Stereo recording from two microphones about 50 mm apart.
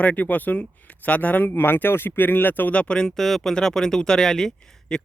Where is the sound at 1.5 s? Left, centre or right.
Left.